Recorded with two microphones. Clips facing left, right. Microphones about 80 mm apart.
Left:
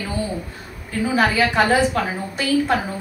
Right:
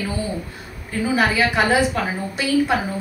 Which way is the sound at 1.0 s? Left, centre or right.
Centre.